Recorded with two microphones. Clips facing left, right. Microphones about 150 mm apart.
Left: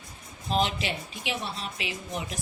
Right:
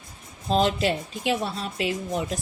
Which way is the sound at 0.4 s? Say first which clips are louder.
Right 6 dB; 35° right (ahead or behind).